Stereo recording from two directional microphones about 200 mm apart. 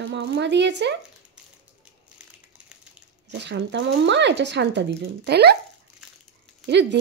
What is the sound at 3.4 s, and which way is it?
Speech, 60° right (ahead or behind).